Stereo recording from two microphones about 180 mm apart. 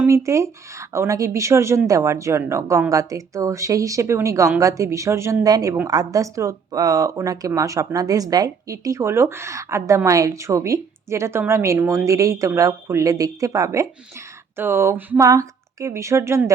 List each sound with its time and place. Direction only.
0.0 s speech: 15° right (ahead or behind)